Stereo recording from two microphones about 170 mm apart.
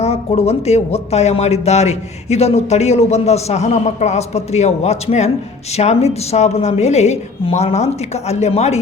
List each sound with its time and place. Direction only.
0.0 s speech: 40° left (ahead or behind)